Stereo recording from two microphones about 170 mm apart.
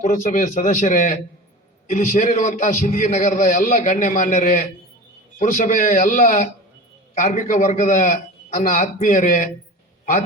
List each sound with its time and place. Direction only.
0.0 s a man's voice: 50° left (ahead or behind)